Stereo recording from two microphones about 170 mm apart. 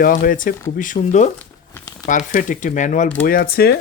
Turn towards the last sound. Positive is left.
turn(degrees=65)  # may be behind; listen again after turning